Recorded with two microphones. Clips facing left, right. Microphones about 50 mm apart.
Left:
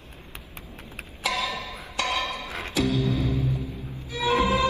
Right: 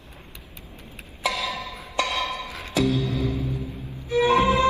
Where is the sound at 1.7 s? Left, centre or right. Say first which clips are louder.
Right 1 dB; left.